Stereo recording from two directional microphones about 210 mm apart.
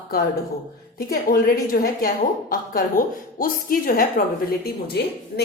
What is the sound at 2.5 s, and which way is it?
A woman's voice, 40° left (ahead or behind).